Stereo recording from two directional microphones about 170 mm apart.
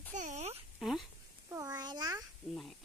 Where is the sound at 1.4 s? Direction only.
20° right (ahead or behind).